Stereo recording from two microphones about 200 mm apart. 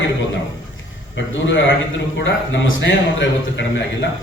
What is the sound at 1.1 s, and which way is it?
A man's voice, 65° left (ahead or behind).